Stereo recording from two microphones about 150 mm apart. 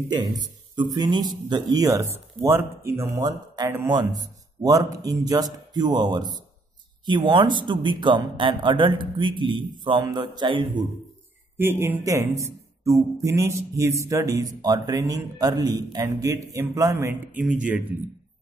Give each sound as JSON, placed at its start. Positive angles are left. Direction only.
{"t": 0.1, "sound": "speech", "side_deg": -25}
{"t": 11.5, "sound": "speech", "side_deg": -15}